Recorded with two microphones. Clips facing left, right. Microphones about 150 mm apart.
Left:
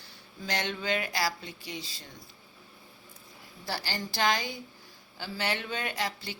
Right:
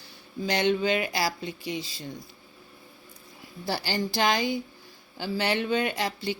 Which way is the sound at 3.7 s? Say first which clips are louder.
Right 7 dB; 15° right (ahead or behind).